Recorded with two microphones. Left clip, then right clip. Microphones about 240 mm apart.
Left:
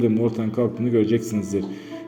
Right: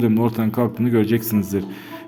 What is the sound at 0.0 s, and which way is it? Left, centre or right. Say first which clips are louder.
A man's voice: right 1 dB; right.